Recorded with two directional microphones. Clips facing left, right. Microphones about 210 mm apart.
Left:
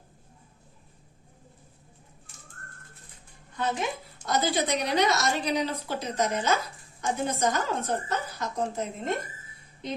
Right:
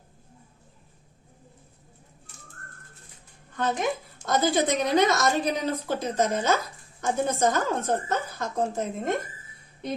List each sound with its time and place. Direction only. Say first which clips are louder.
3.6 s a woman's voice: right 3 dB; 50° right (ahead or behind)